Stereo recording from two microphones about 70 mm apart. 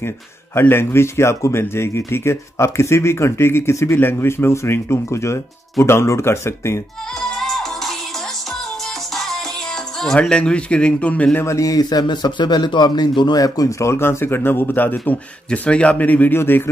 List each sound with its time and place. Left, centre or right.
0.6 s speech: left
7.2 s music: centre
9.1 s music: centre
9.9 s a man's voice: centre
11.4 s a man's voice: left